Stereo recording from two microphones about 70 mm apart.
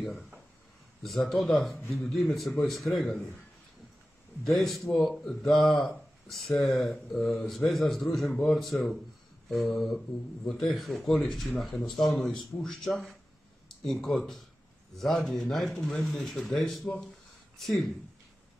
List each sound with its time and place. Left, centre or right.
1.0 s speech: centre
1.8 s speech: left
2.0 s speech: centre
4.5 s speech: centre